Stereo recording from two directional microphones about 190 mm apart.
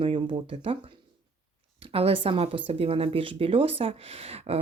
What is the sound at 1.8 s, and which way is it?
Speech, 30° right (ahead or behind).